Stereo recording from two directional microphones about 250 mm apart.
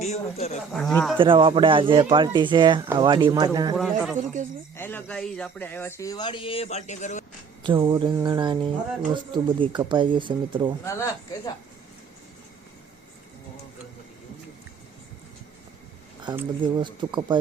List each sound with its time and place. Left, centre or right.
0.0 s speech: left
0.7 s speech: centre
1.2 s speech: right
3.8 s speech: centre; by 7.3 s left
7.6 s speech: centre
10.8 s speech: centre
16.2 s speech: centre